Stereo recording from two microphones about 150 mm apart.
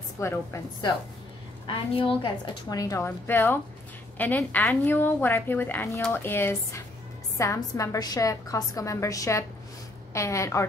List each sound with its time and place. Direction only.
0.2 s a woman's voice: 20° left (ahead or behind)
1.7 s a woman's voice: 35° left (ahead or behind); by 10.6 s 20° left (ahead or behind)